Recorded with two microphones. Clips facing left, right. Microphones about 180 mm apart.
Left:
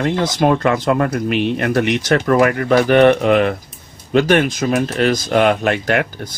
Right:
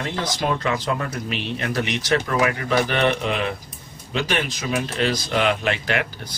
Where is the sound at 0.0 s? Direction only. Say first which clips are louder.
Left 9 dB; 55° left (ahead or behind).